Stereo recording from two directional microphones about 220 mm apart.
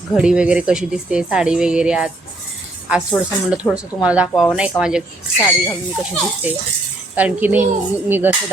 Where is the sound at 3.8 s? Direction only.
5° right (ahead or behind).